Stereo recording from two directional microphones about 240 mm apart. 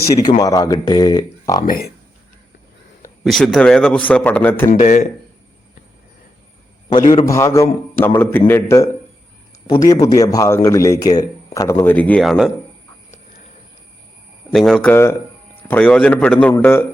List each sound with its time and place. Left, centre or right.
0.1 s speech: centre
1.6 s a man's voice: left
3.2 s a man's voice: centre
4.7 s a man's voice: left
6.9 s speech: left; by 12.5 s centre
14.5 s a man's voice: centre